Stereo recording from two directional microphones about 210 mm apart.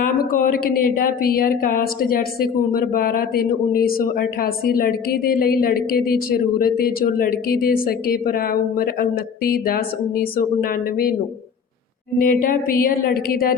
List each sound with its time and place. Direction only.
0.0 s a woman's voice: 40° left (ahead or behind)
12.3 s a woman's voice: 40° left (ahead or behind)